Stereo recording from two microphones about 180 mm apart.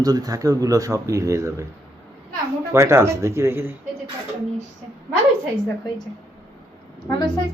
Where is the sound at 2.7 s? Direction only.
15° right (ahead or behind).